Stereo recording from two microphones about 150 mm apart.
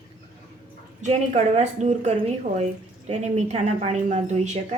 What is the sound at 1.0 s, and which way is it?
A woman's voice, 50° right (ahead or behind).